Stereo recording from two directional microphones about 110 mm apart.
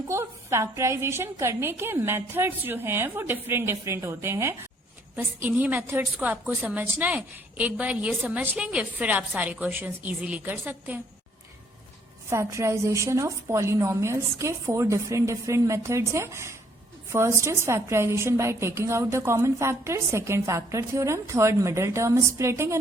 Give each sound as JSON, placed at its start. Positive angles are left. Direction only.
{"t": 0.1, "sound": "a woman's voice", "side_deg": -25}
{"t": 12.3, "sound": "a woman's voice", "side_deg": -25}